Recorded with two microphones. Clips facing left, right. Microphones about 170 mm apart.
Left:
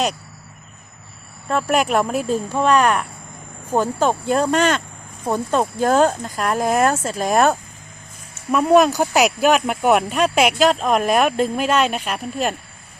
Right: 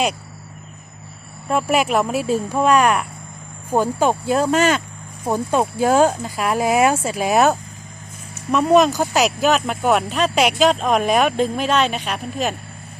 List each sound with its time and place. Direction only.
1.5 s speech: 5° right (ahead or behind)
8.5 s speech: 5° left (ahead or behind)